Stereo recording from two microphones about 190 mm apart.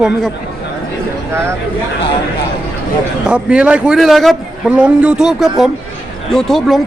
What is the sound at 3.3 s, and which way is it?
A man's voice, 5° right (ahead or behind).